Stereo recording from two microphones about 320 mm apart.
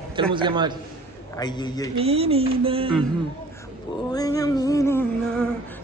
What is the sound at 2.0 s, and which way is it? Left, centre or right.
Speech, centre.